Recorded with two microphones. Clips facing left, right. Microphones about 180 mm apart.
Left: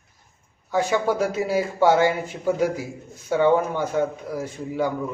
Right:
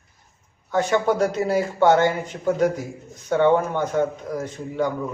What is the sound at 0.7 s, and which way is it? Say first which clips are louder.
A man's voice: right 1 dB; 10° left (ahead or behind).